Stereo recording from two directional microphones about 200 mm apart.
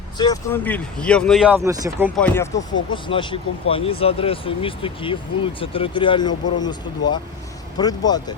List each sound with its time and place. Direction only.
0.2 s speech: 20° left (ahead or behind)
0.6 s speech: 5° left (ahead or behind)
1.5 s speech: 15° right (ahead or behind)
2.1 s speech: 10° left (ahead or behind)